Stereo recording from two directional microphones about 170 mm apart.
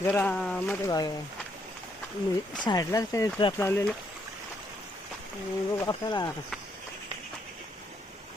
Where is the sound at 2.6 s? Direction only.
20° left (ahead or behind).